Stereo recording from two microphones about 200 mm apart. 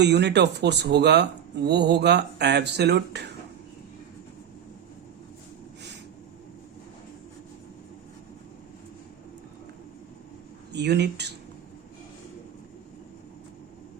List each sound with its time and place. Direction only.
0.0 s speech: 60° right (ahead or behind)
10.7 s speech: 55° right (ahead or behind)